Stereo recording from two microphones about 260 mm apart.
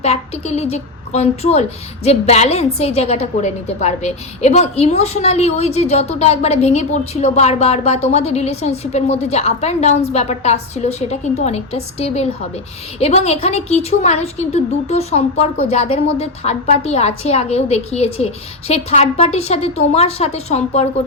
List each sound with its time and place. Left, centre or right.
0.0 s a woman's voice: left